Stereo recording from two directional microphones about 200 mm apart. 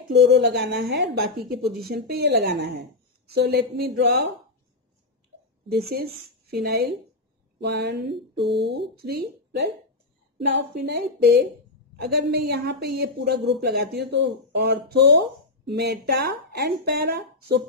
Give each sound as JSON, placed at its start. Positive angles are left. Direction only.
{"t": 0.3, "sound": "a woman's voice", "side_deg": -55}
{"t": 5.7, "sound": "a woman's voice", "side_deg": -50}
{"t": 8.4, "sound": "speech", "side_deg": 0}
{"t": 8.9, "sound": "a woman's voice", "side_deg": -50}